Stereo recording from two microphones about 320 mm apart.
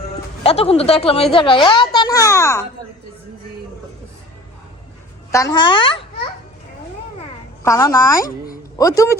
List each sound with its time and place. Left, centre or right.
0.4 s speech: centre
5.3 s speech: centre
7.6 s speech: centre